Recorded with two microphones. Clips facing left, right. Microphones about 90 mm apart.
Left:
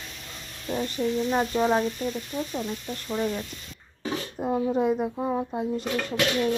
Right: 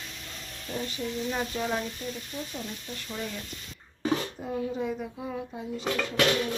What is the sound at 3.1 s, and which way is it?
Speech, 35° left (ahead or behind).